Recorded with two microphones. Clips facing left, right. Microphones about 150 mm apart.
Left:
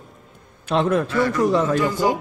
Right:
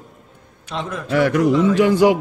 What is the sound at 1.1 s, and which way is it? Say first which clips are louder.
A man's voice: right 3 dB; 80° right.